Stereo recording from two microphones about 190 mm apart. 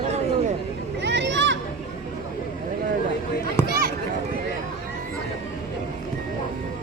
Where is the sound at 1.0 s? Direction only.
65° right (ahead or behind).